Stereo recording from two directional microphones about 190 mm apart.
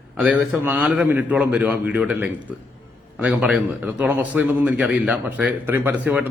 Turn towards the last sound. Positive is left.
turn(degrees=-10)  # may be behind; listen again after turning